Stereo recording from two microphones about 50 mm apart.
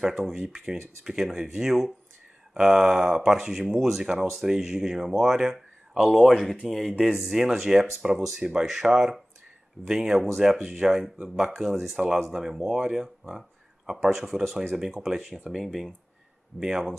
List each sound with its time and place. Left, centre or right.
0.0 s speech: centre
13.3 s a sound: centre
14.0 s speech: centre